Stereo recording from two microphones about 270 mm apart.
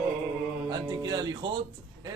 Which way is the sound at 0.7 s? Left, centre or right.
Centre.